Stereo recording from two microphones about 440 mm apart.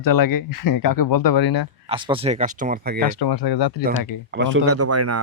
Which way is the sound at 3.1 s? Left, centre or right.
Left.